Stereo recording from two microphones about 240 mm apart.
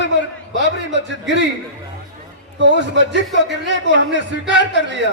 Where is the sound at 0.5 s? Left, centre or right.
Right.